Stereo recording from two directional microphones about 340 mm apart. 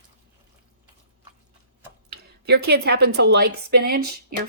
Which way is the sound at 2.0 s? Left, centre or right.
Right.